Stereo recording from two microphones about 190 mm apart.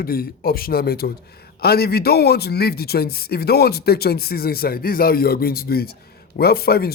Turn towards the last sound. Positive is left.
turn(degrees=55)  # may be behind; listen again after turning